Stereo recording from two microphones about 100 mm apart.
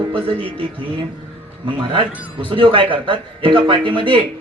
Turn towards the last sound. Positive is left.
turn(degrees=-60)  # may be behind; listen again after turning